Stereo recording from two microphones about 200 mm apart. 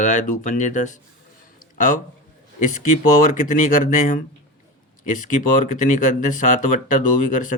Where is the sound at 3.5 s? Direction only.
40° left (ahead or behind).